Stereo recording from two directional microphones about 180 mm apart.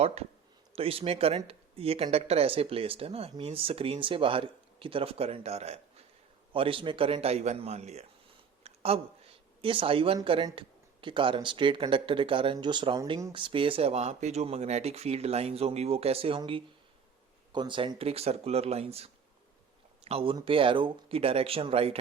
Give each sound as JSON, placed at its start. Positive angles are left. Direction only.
{"t": 0.0, "sound": "speech", "side_deg": -35}
{"t": 8.6, "sound": "a sound", "side_deg": -35}
{"t": 10.2, "sound": "speech", "side_deg": -30}